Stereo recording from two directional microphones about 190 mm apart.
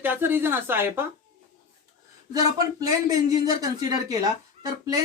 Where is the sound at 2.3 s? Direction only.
20° right (ahead or behind).